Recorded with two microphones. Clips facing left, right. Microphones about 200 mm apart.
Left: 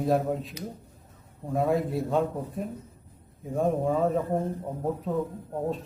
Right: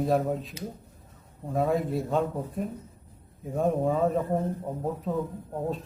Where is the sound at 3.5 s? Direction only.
Centre (ahead or behind).